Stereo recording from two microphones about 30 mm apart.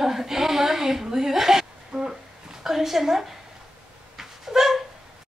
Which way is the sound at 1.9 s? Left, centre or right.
Right.